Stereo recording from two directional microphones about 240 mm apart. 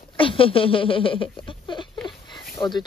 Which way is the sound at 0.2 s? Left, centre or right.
Left.